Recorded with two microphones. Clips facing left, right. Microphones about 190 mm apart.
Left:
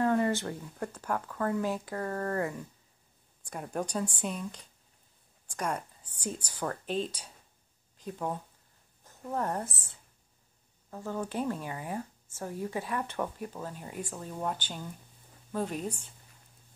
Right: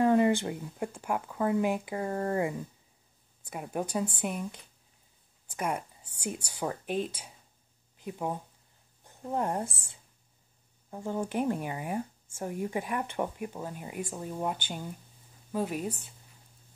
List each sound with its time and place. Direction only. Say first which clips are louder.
0.0 s speech: right 4 dB; 20° right (ahead or behind)
5.6 s a woman's voice: right 1 dB; 10° right (ahead or behind)
8.1 s speech: right 1 dB; 10° right (ahead or behind)
11.2 s speech: right 3 dB; 15° right (ahead or behind)